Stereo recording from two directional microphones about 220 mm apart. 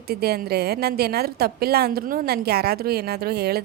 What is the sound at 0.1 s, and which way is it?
A woman's voice, 45° right (ahead or behind).